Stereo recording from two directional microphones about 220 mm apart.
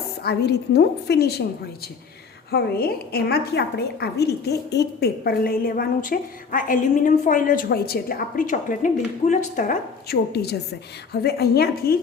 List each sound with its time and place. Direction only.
0.2 s a woman's voice: 45° left (ahead or behind)
2.5 s a woman's voice: 45° left (ahead or behind)